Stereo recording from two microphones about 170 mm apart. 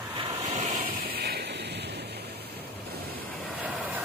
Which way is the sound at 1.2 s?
70° right (ahead or behind).